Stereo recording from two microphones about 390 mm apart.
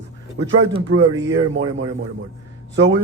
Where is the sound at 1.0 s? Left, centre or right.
Centre.